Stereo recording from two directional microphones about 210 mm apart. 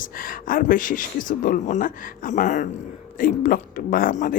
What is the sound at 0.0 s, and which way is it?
Speech, 45° left (ahead or behind).